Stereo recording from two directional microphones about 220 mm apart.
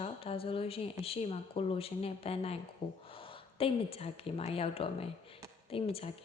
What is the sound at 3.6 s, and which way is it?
A woman's voice, 25° left (ahead or behind).